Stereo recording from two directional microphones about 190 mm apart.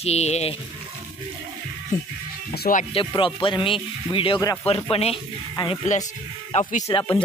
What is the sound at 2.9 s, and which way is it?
Speech, 25° left (ahead or behind).